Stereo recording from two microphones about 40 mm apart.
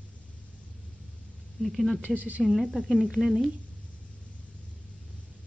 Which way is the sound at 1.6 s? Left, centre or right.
Centre.